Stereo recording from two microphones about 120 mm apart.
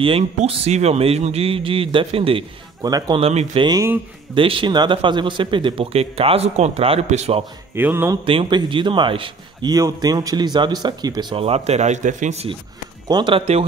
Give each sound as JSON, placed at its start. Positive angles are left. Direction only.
{"t": 0.4, "sound": "speech", "side_deg": -70}
{"t": 2.8, "sound": "speech", "side_deg": -30}
{"t": 3.2, "sound": "speech", "side_deg": -55}
{"t": 4.4, "sound": "speech", "side_deg": -45}
{"t": 7.7, "sound": "speech", "side_deg": -20}
{"t": 8.3, "sound": "speech", "side_deg": -45}
{"t": 9.7, "sound": "speech", "side_deg": -30}
{"t": 11.3, "sound": "speech", "side_deg": -55}
{"t": 13.1, "sound": "speech", "side_deg": -40}